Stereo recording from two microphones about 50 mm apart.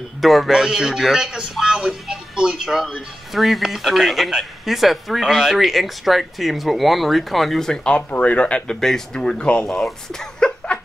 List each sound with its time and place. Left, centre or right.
0.2 s speech: centre; by 8.7 s left
8.8 s speech: centre
10.4 s a sound: centre